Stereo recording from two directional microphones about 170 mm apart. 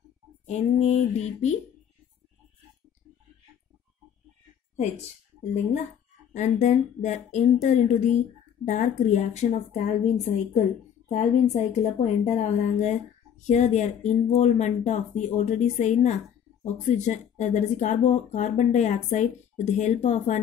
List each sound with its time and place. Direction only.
0.5 s speech: 40° left (ahead or behind)
6.3 s speech: 45° left (ahead or behind)